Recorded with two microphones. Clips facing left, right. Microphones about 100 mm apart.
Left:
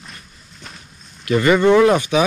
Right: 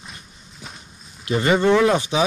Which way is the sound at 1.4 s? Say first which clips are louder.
Left 4 dB; 60° left (ahead or behind).